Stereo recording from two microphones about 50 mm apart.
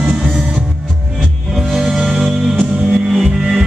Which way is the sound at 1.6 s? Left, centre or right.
Centre.